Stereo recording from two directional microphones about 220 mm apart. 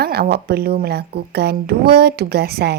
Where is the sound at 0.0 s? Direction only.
45° right (ahead or behind).